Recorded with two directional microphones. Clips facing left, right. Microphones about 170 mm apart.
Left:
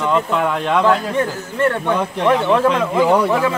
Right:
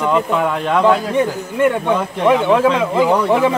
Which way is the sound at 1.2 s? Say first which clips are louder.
Right 3 dB; 15° right (ahead or behind).